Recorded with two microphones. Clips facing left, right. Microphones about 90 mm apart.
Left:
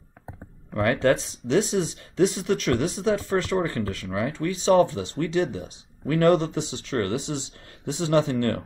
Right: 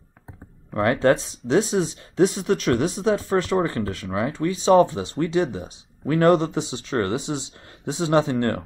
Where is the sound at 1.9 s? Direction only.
30° right (ahead or behind).